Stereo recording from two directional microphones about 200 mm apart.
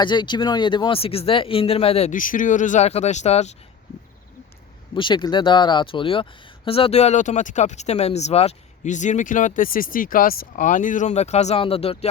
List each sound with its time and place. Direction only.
0.0 s speech: 25° left (ahead or behind)
4.9 s speech: 25° left (ahead or behind)